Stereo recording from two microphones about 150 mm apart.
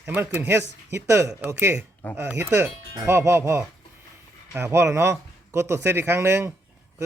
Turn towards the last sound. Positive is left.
turn(degrees=-15)  # may be behind; listen again after turning